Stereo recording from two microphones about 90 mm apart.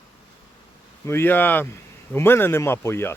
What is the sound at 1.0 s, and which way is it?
Speech, 25° left (ahead or behind).